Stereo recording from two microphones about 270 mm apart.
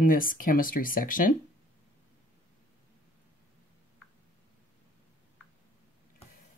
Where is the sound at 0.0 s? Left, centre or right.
Left.